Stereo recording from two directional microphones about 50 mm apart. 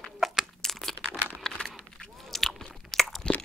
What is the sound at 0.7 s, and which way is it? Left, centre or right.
Crumpling, centre.